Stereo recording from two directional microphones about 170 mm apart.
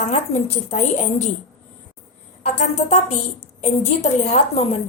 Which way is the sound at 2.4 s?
45° left (ahead or behind).